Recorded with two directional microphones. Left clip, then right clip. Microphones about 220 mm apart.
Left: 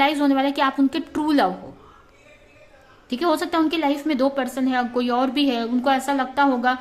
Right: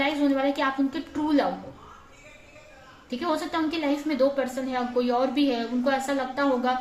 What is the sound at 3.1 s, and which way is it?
A woman's voice, 50° left (ahead or behind).